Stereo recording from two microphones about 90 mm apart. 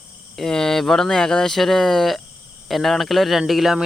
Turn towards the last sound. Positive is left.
turn(degrees=-5)  # may be behind; listen again after turning